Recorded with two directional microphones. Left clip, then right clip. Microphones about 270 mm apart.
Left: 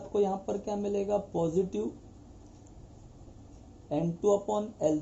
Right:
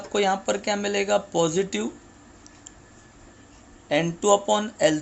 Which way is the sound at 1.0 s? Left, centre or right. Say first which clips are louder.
Right 8 dB; right.